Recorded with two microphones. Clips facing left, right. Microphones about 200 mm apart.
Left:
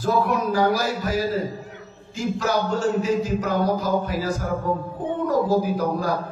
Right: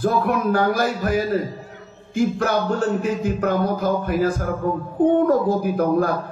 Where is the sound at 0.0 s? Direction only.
55° right (ahead or behind).